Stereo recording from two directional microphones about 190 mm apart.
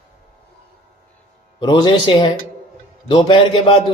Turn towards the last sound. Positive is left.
turn(degrees=25)  # may be behind; listen again after turning